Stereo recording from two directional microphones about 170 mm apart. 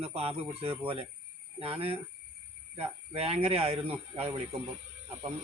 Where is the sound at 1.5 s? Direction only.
35° right (ahead or behind).